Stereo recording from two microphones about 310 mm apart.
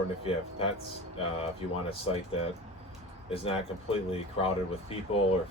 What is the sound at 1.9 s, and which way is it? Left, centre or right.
Speech, centre.